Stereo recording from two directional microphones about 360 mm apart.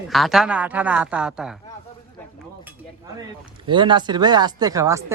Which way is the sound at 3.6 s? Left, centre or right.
Centre.